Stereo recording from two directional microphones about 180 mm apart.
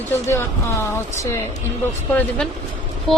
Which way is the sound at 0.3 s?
15° left (ahead or behind).